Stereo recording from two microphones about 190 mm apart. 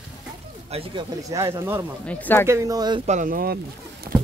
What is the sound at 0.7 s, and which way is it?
Speech, 30° right (ahead or behind).